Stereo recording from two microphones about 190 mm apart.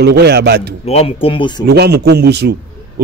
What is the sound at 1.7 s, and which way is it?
Speech, 60° right (ahead or behind).